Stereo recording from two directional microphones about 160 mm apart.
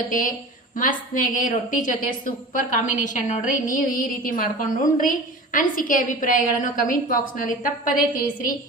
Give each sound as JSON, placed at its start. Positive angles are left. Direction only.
{"t": 0.1, "sound": "a woman's voice", "side_deg": 55}